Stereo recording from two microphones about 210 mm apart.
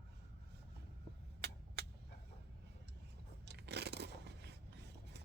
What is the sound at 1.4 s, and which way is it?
Vehicle, 50° right (ahead or behind).